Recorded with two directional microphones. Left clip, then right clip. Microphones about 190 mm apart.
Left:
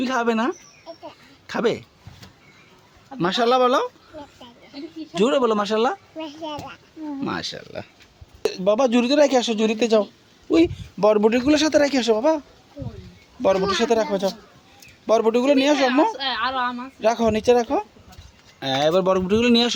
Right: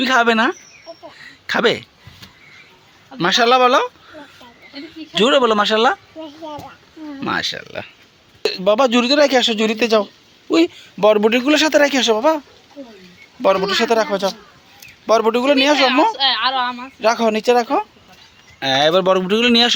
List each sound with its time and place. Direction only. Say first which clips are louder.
0.0 s a man's voice: right 8 dB; 5° right (ahead or behind)
1.2 s a sound: right 7 dB; 5° right (ahead or behind)
3.2 s a man's voice: right 5 dB; centre (ahead or behind)
5.1 s a man's voice: right 6 dB; 5° right (ahead or behind)
7.2 s a man's voice: right 8 dB; 5° right (ahead or behind)
13.4 s a man's voice: right 4 dB; centre (ahead or behind)
16.1 s a woman's voice: right 7 dB; 50° left (ahead or behind)
17.0 s a man's voice: right 4 dB; 5° left (ahead or behind)